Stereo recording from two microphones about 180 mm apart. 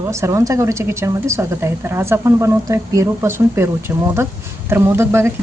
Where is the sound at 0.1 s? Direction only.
15° right (ahead or behind).